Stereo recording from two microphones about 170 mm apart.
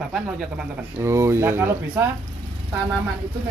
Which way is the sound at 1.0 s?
15° right (ahead or behind).